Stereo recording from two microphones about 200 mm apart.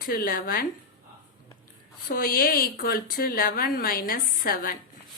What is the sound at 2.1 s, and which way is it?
A woman's voice, 45° left (ahead or behind).